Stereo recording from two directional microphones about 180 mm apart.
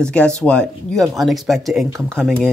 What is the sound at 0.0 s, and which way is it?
Speech, 5° left (ahead or behind).